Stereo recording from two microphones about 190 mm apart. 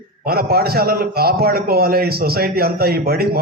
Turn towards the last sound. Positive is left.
turn(degrees=-55)  # may be behind; listen again after turning